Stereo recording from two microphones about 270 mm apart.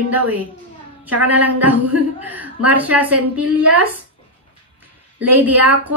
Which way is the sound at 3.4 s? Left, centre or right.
Right.